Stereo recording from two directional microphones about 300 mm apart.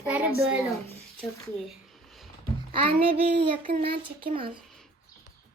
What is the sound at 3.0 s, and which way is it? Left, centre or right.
Speech, right.